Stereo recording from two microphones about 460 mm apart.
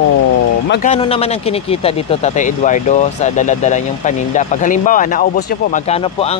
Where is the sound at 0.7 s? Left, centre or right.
Centre.